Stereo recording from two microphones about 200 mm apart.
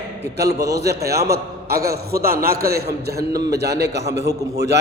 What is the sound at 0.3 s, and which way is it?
A man's voice, 55° right (ahead or behind).